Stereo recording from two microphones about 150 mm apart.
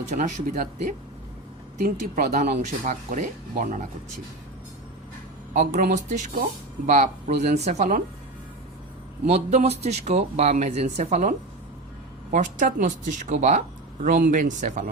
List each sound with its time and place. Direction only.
0.1 s speech: 55° right (ahead or behind)
1.8 s speech: 75° right (ahead or behind)
2.6 s speech: 60° right (ahead or behind)
5.9 s speech: 55° right (ahead or behind)
9.2 s speech: 45° right (ahead or behind)